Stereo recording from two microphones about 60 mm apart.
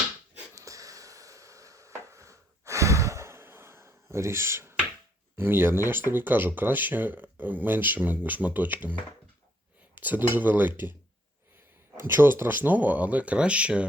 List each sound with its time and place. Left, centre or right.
0.5 s a sound: right
2.0 s sigh: right
5.4 s speech: right
11.9 s speech: right